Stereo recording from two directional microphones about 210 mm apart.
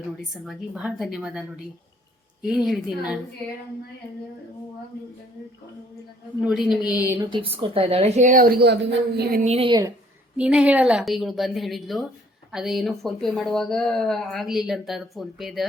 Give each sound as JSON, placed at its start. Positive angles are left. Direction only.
{"t": 0.4, "sound": "speech", "side_deg": -5}
{"t": 2.4, "sound": "speech", "side_deg": -5}
{"t": 6.4, "sound": "speech", "side_deg": 0}
{"t": 7.3, "sound": "a woman's voice", "side_deg": -25}
{"t": 9.4, "sound": "a woman's voice", "side_deg": -30}
{"t": 10.3, "sound": "speech", "side_deg": -5}